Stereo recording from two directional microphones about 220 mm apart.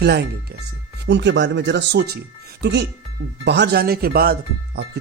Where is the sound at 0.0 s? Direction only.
50° right (ahead or behind).